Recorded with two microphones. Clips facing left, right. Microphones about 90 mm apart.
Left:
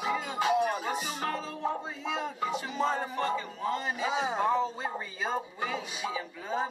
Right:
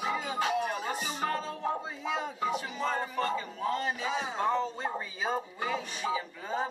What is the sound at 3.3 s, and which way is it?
Speech, centre (ahead or behind).